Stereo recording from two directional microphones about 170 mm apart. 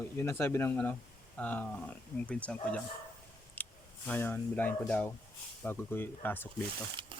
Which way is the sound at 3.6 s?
10° left (ahead or behind).